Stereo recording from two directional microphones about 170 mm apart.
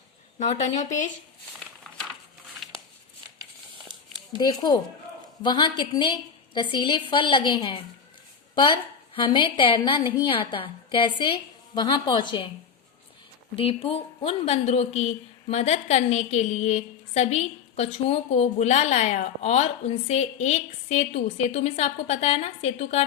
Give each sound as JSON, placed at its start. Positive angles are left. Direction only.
{"t": 0.3, "sound": "speech", "side_deg": 45}
{"t": 4.4, "sound": "a woman's voice", "side_deg": 25}
{"t": 13.6, "sound": "a woman's voice", "side_deg": 35}